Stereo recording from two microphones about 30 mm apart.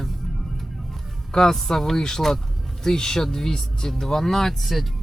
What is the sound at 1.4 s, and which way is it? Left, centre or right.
Speech, centre.